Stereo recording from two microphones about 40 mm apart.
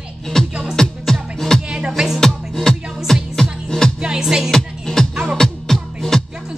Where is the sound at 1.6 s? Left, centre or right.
Right.